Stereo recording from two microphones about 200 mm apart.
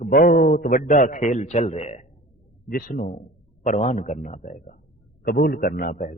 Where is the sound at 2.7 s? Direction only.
45° left (ahead or behind).